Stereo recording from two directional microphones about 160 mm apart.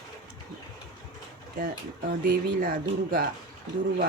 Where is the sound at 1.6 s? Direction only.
60° right (ahead or behind).